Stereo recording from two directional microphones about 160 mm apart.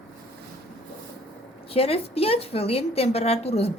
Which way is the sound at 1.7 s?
35° left (ahead or behind).